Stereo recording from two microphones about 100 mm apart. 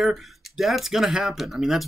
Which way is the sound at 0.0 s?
Centre (ahead or behind).